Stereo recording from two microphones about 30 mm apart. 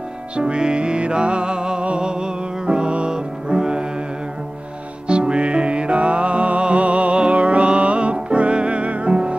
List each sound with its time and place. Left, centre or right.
0.4 s music: right
5.0 s music: right